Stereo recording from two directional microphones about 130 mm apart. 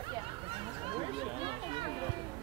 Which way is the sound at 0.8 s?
45° right (ahead or behind).